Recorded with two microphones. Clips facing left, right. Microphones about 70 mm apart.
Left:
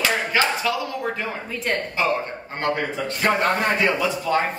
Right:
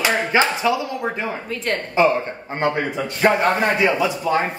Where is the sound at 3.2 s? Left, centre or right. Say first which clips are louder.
Right 4 dB; centre.